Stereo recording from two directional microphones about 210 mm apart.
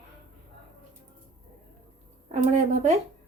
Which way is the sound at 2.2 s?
35° right (ahead or behind).